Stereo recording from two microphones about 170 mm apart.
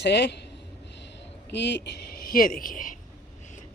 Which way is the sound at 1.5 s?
90° left.